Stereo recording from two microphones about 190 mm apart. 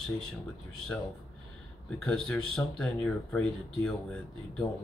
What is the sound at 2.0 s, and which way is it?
Speech, 5° left (ahead or behind).